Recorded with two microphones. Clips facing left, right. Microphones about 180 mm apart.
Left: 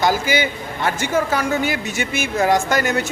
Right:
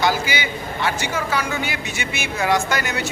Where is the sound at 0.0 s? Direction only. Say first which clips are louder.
Left 3 dB; 45° left (ahead or behind).